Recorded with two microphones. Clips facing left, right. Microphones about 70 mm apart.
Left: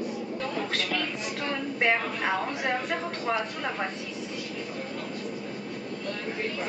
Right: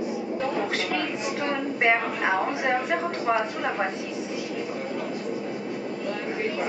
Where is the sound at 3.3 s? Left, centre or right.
Centre.